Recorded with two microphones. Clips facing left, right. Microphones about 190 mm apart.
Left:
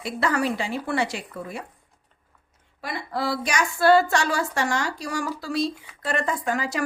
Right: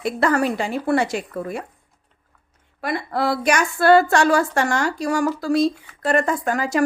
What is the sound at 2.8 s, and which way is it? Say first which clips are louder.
Speech: right 6 dB; 55° right (ahead or behind).